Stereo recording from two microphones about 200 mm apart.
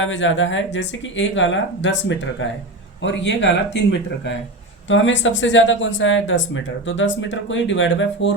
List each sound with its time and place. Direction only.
0.0 s speech: 70° left (ahead or behind)